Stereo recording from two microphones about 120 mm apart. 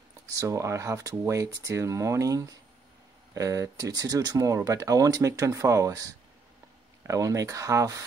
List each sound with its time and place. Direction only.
0.3 s speech: 25° right (ahead or behind)